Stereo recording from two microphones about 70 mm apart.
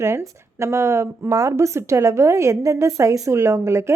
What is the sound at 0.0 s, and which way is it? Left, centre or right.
Speech, right.